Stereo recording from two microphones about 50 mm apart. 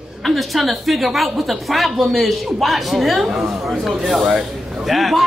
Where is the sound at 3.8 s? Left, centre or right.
Centre.